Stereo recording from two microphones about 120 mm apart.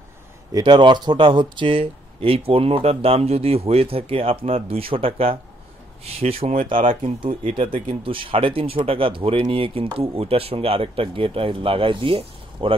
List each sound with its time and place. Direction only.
0.5 s speech: 35° right (ahead or behind); by 6.5 s 55° right (ahead or behind)
6.9 s speech: 45° right (ahead or behind)